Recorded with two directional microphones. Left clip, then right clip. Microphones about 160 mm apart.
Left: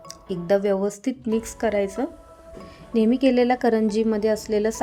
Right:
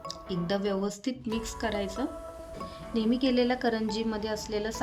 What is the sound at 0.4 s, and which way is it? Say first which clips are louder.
A woman's voice: left 10 dB; 55° left (ahead or behind).